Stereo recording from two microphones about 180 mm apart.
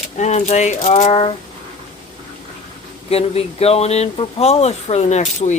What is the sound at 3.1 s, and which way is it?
Speech, 35° left (ahead or behind).